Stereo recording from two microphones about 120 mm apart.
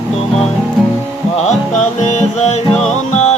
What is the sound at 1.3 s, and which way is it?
Music, 70° left (ahead or behind).